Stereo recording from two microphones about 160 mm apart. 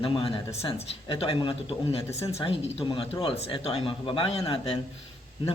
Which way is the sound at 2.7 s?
35° left (ahead or behind).